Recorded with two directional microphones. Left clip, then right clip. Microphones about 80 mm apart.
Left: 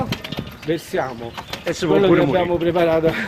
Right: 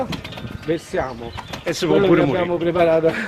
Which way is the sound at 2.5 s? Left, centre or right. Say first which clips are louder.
Right 1 dB; left.